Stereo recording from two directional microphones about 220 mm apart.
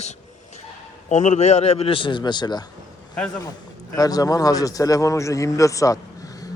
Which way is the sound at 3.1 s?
5° left (ahead or behind).